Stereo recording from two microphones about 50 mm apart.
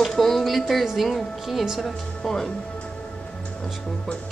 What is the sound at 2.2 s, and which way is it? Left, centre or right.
Speech, centre.